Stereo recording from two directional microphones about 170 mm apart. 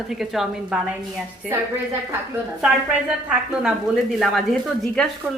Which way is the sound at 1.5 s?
15° right (ahead or behind).